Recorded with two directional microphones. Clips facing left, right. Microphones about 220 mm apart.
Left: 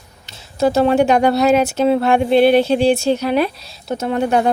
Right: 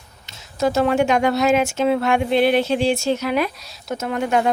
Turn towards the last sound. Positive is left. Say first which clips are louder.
# left 4 dB
turn(degrees=35)  # may be behind; listen again after turning